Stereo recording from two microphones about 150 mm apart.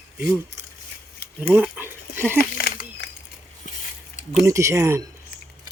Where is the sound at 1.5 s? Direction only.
10° right (ahead or behind).